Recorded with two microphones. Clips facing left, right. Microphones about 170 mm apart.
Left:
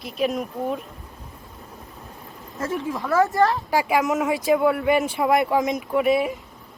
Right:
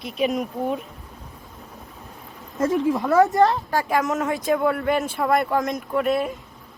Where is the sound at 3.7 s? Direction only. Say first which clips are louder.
Left 1 dB; 5° left (ahead or behind).